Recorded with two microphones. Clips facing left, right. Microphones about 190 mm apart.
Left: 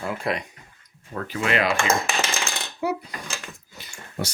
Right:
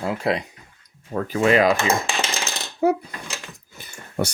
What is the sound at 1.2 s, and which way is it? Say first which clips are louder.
Speech: right 7 dB; 40° right (ahead or behind).